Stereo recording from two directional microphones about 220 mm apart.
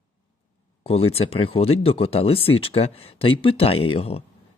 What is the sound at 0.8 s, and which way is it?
Speech, 25° left (ahead or behind).